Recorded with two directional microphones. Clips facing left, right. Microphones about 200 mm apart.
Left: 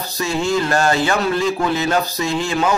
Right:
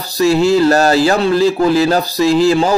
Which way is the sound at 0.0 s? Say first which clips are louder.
Right 9 dB; 35° right (ahead or behind).